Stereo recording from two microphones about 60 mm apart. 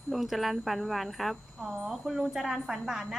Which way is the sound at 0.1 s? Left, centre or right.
Centre.